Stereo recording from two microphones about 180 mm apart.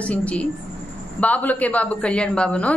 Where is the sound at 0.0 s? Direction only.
5° left (ahead or behind).